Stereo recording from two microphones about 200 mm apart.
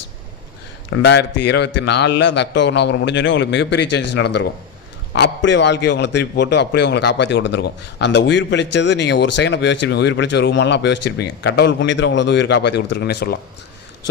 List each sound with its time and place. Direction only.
0.9 s a man's voice: 60° left (ahead or behind)